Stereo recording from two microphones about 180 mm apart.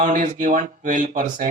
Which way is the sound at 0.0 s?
45° right (ahead or behind).